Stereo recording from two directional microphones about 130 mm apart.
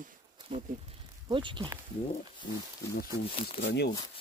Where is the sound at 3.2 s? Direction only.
45° left (ahead or behind).